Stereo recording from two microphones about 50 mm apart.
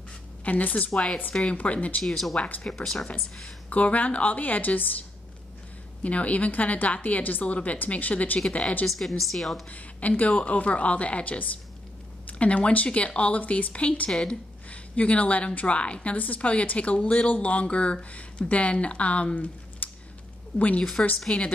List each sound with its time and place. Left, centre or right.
0.5 s a woman's voice: left
0.9 s a woman's voice: centre
2.0 s a woman's voice: centre
3.7 s a woman's voice: left
6.0 s a woman's voice: left
8.8 s a woman's voice: centre
9.7 s a woman's voice: left
19.8 s a sound: left
20.5 s a woman's voice: left
21.3 s a woman's voice: centre